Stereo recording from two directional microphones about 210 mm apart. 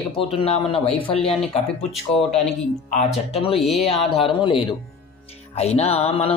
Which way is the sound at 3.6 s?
Centre (ahead or behind).